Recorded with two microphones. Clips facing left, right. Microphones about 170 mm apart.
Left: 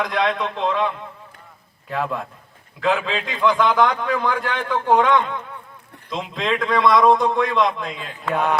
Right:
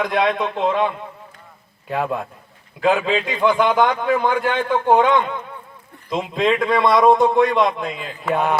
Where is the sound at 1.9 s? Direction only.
30° right (ahead or behind).